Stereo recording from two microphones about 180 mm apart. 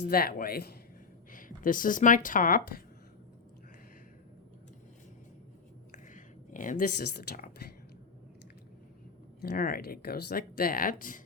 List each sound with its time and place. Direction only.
0.0 s speech: 55° left (ahead or behind)
5.9 s a sound: 45° left (ahead or behind)
9.4 s speech: 55° left (ahead or behind)